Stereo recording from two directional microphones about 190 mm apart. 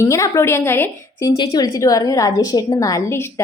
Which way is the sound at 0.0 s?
15° left (ahead or behind).